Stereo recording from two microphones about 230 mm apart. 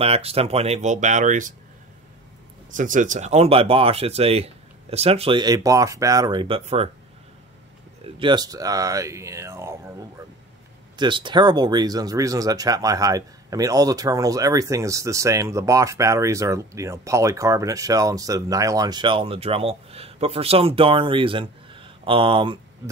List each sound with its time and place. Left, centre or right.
0.0 s speech: right
2.7 s speech: right
8.0 s speech: right
11.0 s speech: right